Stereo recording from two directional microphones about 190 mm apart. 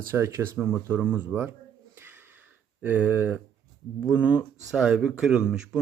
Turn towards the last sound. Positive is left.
turn(degrees=-5)  # may be behind; listen again after turning